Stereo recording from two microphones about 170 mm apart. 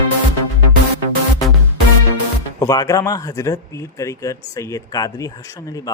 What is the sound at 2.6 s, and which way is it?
Speech, 20° left (ahead or behind).